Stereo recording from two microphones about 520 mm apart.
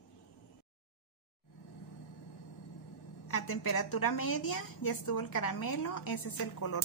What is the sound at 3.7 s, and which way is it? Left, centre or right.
A woman's voice, left.